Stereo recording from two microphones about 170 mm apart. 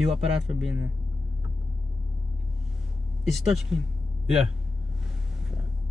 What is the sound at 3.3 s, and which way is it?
Speech, centre (ahead or behind).